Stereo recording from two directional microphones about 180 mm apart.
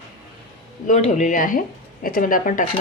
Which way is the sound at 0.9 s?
40° left (ahead or behind).